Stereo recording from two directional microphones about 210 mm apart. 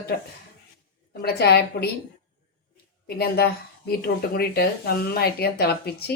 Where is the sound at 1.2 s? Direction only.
50° left (ahead or behind).